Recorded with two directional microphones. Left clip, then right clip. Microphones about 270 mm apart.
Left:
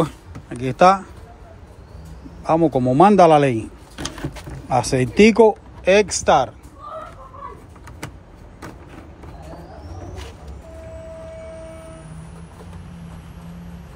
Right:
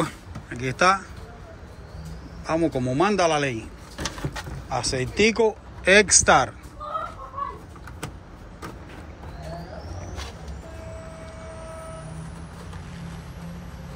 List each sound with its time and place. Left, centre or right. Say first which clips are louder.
0.0 s speech: left 5 dB; centre
2.4 s a man's voice: left 7 dB; centre
4.6 s speech: left 8 dB; centre
5.9 s speech: left 1 dB; centre